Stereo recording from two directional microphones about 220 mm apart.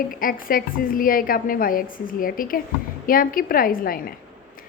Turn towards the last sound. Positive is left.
turn(degrees=40)  # may be behind; listen again after turning